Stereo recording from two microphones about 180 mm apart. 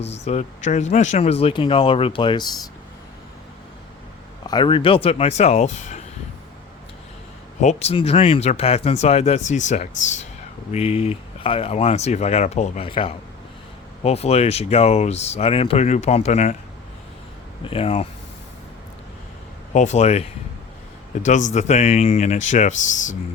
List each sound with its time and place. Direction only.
0.0 s speech: 35° left (ahead or behind)
4.4 s speech: 25° left (ahead or behind)
7.6 s speech: 40° left (ahead or behind)
17.6 s speech: 30° left (ahead or behind)
19.7 s speech: 40° left (ahead or behind)